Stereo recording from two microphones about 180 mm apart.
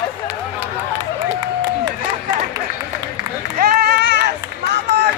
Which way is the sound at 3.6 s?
55° right (ahead or behind).